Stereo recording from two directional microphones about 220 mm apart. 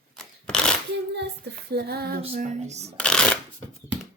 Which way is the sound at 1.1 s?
50° right (ahead or behind).